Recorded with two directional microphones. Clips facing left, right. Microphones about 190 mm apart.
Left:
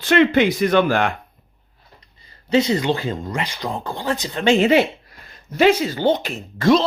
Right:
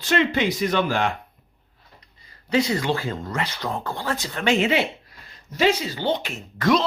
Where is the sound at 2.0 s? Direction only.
25° left (ahead or behind).